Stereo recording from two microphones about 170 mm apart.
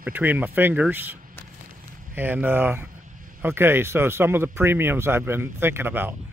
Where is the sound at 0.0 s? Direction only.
10° right (ahead or behind).